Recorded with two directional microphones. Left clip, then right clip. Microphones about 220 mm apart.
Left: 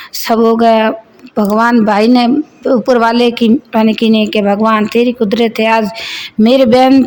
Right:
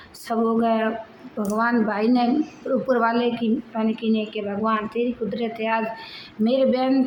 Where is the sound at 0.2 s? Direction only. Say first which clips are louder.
Left 13 dB; 45° left (ahead or behind).